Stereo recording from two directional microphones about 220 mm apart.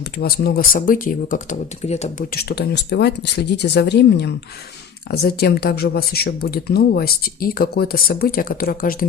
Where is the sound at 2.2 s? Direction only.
45° left (ahead or behind).